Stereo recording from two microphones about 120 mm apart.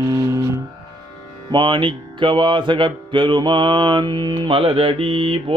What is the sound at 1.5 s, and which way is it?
Mantra, 40° right (ahead or behind).